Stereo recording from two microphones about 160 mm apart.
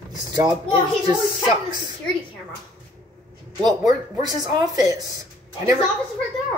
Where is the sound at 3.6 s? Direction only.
25° right (ahead or behind).